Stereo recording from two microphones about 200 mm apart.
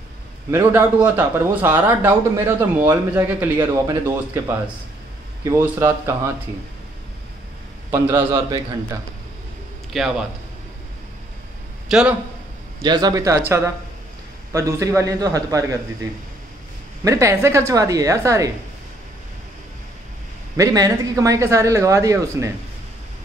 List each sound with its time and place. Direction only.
0.5 s speech: 10° right (ahead or behind)
7.9 s speech: 15° right (ahead or behind)
9.9 s a man's voice: centre (ahead or behind)
11.9 s a man's voice: 5° right (ahead or behind)
12.8 s speech: 20° right (ahead or behind)
17.0 s speech: 15° right (ahead or behind)
20.5 s speech: 15° right (ahead or behind)